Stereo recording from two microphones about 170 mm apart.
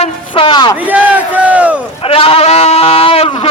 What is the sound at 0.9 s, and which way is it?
Speech, 10° right (ahead or behind).